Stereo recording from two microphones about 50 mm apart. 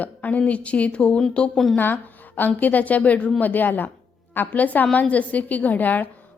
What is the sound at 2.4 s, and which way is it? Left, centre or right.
A woman's voice, left.